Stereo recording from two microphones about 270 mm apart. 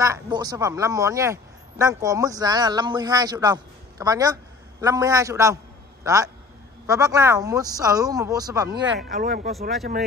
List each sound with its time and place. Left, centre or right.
0.0 s a man's voice: centre
8.7 s speech: right